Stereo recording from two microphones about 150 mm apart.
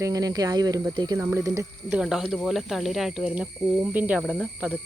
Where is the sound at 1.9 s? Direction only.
5° right (ahead or behind).